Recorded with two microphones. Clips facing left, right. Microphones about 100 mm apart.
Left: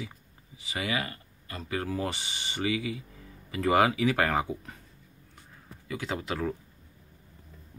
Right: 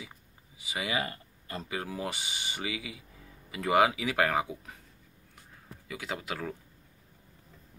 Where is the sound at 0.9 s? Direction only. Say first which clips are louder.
Even; 30° right (ahead or behind).